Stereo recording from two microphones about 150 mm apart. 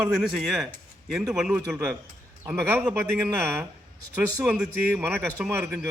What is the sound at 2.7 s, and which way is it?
Speech, 15° right (ahead or behind).